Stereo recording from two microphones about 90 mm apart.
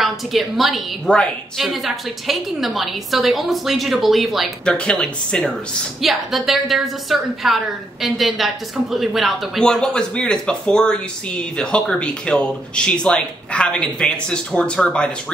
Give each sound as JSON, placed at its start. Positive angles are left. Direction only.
{"t": 0.0, "sound": "a woman's voice", "side_deg": 0}
{"t": 1.0, "sound": "a woman's voice", "side_deg": 10}
{"t": 1.6, "sound": "a woman's voice", "side_deg": 0}
{"t": 4.6, "sound": "a woman's voice", "side_deg": 10}
{"t": 5.9, "sound": "a woman's voice", "side_deg": 0}